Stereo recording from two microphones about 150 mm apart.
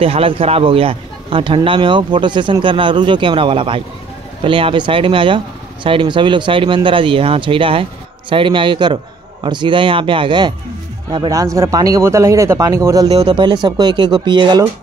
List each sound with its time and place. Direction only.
0.0 s a man's voice: 40° right (ahead or behind)